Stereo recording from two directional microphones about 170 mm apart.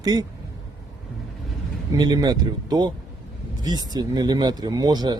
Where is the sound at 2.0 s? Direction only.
25° right (ahead or behind).